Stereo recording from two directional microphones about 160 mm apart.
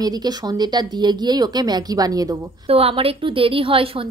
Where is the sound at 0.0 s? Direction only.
25° right (ahead or behind).